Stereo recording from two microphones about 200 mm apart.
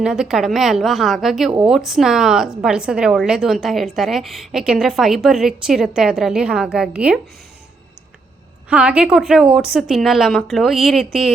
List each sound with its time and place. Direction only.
0.0 s a woman's voice: 5° right (ahead or behind)
8.7 s a woman's voice: 5° right (ahead or behind)